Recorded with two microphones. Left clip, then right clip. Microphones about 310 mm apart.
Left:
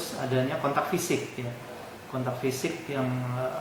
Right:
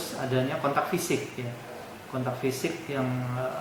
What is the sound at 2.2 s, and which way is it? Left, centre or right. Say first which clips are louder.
Speech: even; centre.